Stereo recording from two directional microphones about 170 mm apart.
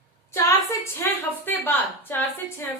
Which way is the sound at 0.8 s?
15° left (ahead or behind).